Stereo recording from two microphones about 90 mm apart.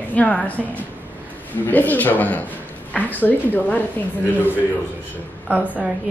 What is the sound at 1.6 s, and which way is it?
A woman's voice, 20° left (ahead or behind).